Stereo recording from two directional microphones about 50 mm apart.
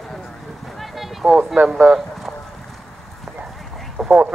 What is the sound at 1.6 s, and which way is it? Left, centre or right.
Speech, right.